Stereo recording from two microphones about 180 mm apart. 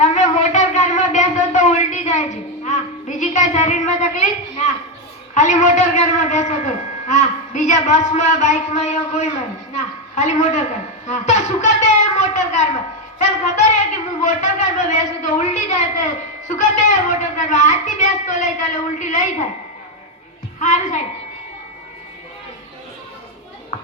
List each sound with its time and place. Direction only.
0.0 s a sound: 40° left (ahead or behind)
5.3 s a man's voice: 40° left (ahead or behind)
13.1 s music: 40° left (ahead or behind)
14.3 s a woman's voice: 40° left (ahead or behind)
20.6 s a woman's voice: 45° left (ahead or behind)